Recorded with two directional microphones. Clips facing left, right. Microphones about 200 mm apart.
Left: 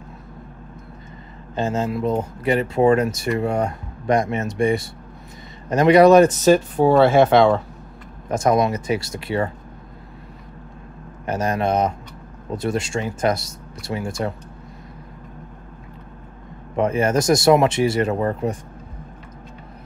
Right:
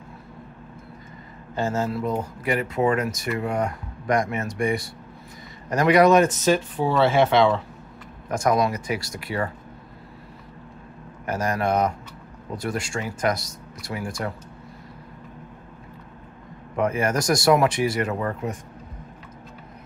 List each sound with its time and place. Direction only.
1.5 s speech: 20° left (ahead or behind); by 7.6 s 45° left (ahead or behind)
8.3 s speech: 25° left (ahead or behind)
11.2 s speech: 20° left (ahead or behind)
16.7 s speech: 25° left (ahead or behind)